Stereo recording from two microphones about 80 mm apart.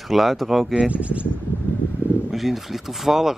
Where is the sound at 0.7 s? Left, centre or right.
Centre.